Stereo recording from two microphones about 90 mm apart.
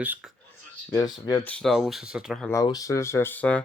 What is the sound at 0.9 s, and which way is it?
Speech, 45° left (ahead or behind).